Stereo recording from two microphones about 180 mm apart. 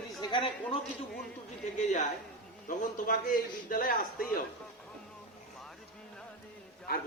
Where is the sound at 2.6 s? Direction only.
50° left (ahead or behind).